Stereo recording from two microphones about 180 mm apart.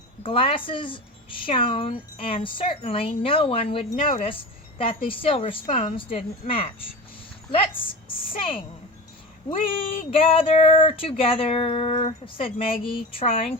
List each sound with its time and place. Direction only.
0.2 s a woman's voice: 30° left (ahead or behind)
8.0 s a woman's voice: 30° left (ahead or behind)